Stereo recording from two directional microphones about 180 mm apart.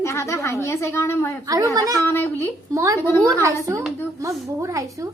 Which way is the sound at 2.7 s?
15° right (ahead or behind).